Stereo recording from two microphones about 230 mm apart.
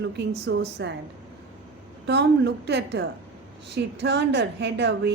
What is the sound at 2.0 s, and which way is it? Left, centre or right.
A woman's voice, right.